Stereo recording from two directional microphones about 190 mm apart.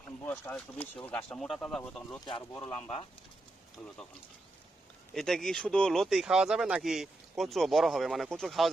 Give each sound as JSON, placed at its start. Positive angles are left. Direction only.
{"t": 0.3, "sound": "speech", "side_deg": 10}
{"t": 2.2, "sound": "speech", "side_deg": 20}
{"t": 2.6, "sound": "speech", "side_deg": 10}
{"t": 5.1, "sound": "speech", "side_deg": 0}